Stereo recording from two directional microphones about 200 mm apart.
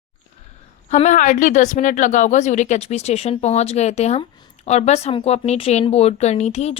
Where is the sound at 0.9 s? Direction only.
35° left (ahead or behind).